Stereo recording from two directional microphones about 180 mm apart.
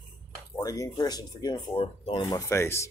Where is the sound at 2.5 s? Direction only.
15° left (ahead or behind).